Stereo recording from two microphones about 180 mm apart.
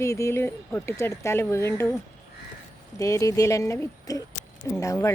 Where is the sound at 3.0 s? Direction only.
20° left (ahead or behind).